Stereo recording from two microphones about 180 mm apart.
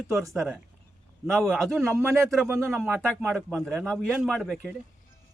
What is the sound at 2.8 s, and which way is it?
Speech, 10° right (ahead or behind).